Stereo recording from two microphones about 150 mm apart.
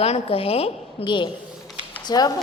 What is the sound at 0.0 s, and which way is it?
A woman's voice, 40° left (ahead or behind).